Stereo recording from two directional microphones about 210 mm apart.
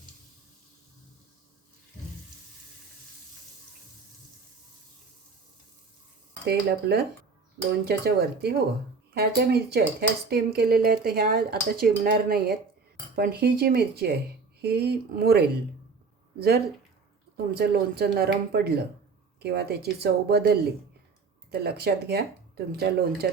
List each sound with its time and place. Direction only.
6.4 s speech: 50° right (ahead or behind)
17.3 s speech: 50° right (ahead or behind)